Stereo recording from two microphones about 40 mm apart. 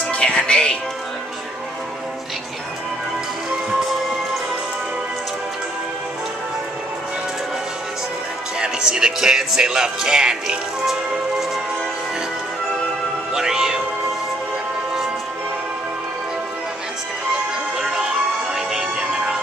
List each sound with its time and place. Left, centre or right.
0.1 s music: left
8.5 s speech: centre
13.3 s music: centre
17.9 s music: centre
19.1 s music: right